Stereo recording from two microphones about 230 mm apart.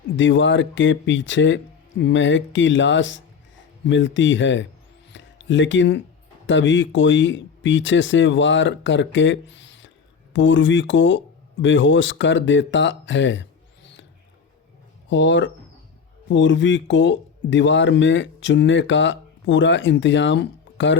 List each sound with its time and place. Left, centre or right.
0.2 s speech: left
5.1 s a sound: left
6.5 s speech: left
15.1 s speech: left